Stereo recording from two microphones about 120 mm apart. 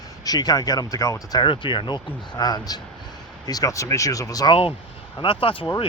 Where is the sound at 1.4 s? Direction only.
45° left (ahead or behind).